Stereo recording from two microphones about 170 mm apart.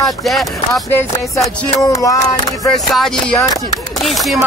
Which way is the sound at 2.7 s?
Centre (ahead or behind).